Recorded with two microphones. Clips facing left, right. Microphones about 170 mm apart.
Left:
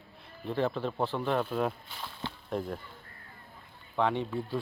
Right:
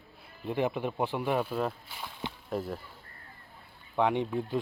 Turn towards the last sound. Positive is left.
turn(degrees=-15)  # may be behind; listen again after turning